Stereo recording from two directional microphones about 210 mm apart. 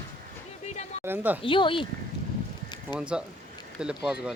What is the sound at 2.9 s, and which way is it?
Speech, 5° right (ahead or behind).